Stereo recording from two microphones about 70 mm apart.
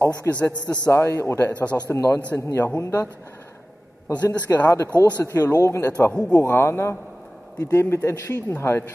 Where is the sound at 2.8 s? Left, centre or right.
Left.